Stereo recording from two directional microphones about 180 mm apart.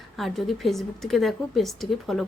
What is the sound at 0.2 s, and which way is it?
Speech, centre (ahead or behind).